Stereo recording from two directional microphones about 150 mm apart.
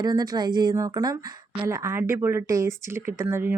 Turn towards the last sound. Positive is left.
turn(degrees=-15)  # may be behind; listen again after turning